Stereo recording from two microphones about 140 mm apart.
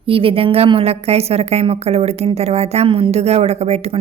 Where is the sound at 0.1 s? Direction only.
40° right (ahead or behind).